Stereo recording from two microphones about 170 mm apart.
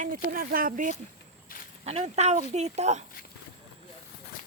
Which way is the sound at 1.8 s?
40° right (ahead or behind).